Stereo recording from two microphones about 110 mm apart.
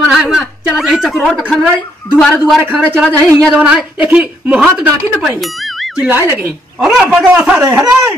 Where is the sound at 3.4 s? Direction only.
5° right (ahead or behind).